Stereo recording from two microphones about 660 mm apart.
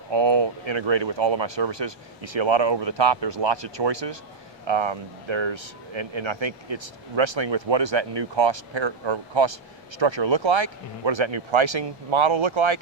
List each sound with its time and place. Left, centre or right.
0.1 s speech: right